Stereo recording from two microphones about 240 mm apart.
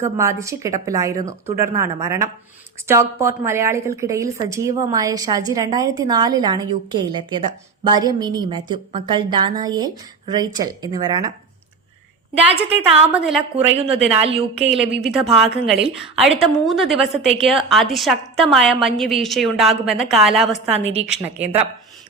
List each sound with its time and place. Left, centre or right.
0.0 s a woman's voice: centre
12.7 s a woman's voice: right
13.1 s a woman's voice: centre
13.7 s a woman's voice: right
14.7 s a woman's voice: centre